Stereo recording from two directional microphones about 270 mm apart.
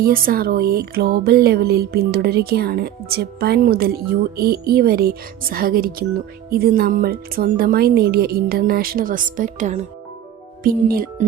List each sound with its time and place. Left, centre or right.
0.0 s speech: right